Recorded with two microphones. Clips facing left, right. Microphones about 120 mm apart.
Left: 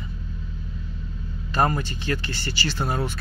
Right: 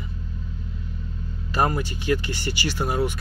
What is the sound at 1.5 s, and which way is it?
Speech, 10° right (ahead or behind).